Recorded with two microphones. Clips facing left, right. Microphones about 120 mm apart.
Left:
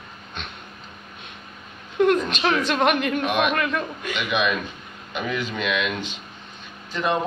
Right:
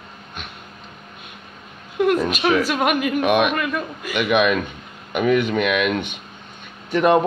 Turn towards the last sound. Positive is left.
turn(degrees=-65)  # may be behind; listen again after turning